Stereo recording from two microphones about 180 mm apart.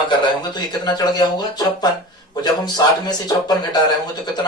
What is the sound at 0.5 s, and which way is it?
Speech, 25° left (ahead or behind).